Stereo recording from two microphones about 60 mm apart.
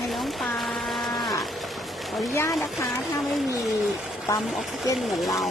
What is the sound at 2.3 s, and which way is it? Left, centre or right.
Speech, left.